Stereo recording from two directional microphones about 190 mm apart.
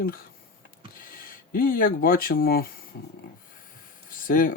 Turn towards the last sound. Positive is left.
turn(degrees=45)  # may be behind; listen again after turning